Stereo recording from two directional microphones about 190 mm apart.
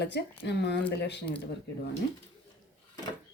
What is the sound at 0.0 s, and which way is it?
Speech, 65° left (ahead or behind).